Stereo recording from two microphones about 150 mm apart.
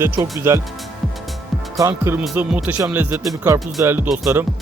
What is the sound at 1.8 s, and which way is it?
Speech, 20° right (ahead or behind).